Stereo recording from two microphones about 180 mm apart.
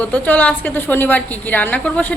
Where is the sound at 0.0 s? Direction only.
10° left (ahead or behind).